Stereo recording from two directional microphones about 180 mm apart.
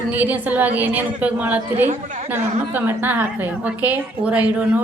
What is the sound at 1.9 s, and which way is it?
Speech, 40° right (ahead or behind).